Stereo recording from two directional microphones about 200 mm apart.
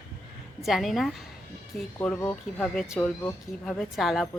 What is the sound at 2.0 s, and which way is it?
Speech, 10° left (ahead or behind).